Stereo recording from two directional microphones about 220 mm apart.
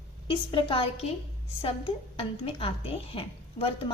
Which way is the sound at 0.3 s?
20° left (ahead or behind).